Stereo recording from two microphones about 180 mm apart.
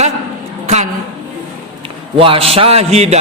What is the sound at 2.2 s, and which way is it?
A man's voice, 30° right (ahead or behind).